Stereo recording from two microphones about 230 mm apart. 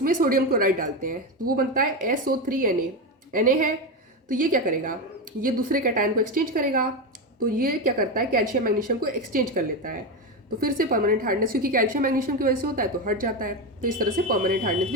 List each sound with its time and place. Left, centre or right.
0.0 s a woman's voice: right